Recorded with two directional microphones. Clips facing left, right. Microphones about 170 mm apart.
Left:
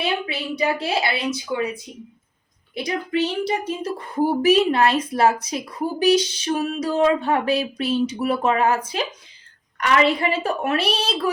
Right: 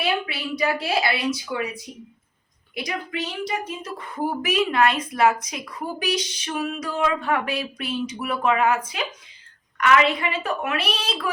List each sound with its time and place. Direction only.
0.0 s a woman's voice: 25° left (ahead or behind)